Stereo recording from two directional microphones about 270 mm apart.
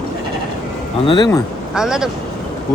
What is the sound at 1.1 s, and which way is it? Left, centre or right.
Speech, centre.